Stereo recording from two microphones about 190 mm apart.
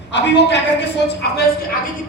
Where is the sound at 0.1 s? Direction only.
65° left (ahead or behind).